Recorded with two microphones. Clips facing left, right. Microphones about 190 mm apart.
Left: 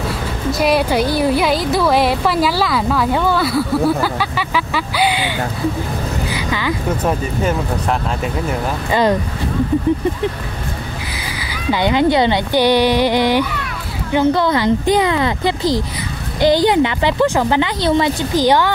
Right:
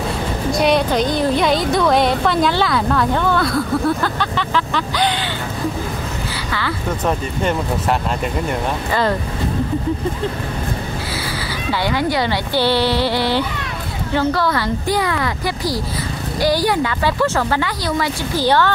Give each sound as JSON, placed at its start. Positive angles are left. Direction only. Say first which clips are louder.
{"t": 0.5, "sound": "a woman's voice", "louder": "left 1 dB", "side_deg": 5}
{"t": 6.3, "sound": "speech", "louder": "left 4 dB", "side_deg": 15}
{"t": 11.7, "sound": "a woman's voice", "louder": "left 5 dB", "side_deg": 20}